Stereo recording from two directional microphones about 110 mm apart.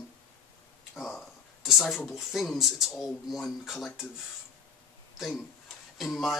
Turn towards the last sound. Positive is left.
turn(degrees=0)  # may be behind; listen again after turning